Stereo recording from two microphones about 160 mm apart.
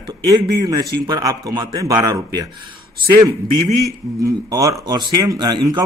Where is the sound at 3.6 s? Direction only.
20° left (ahead or behind).